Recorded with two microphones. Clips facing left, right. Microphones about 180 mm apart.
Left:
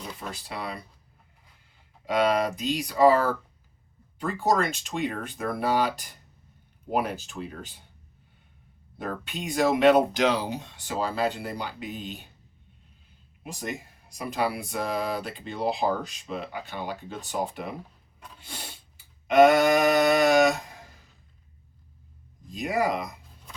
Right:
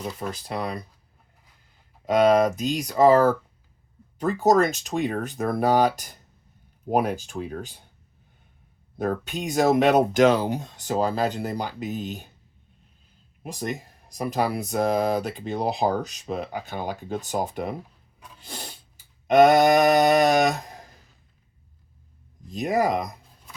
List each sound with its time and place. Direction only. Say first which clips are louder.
0.2 s speech: right 6 dB; 45° right (ahead or behind)
2.0 s speech: right 6 dB; 45° right (ahead or behind)
9.0 s speech: right 7 dB; 45° right (ahead or behind)
13.4 s speech: right 4 dB; 40° right (ahead or behind)
19.3 s speech: right 2 dB; 40° right (ahead or behind)
22.5 s speech: right 4 dB; 40° right (ahead or behind)